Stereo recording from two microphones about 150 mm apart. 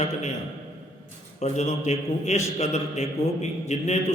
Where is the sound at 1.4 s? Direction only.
50° left (ahead or behind).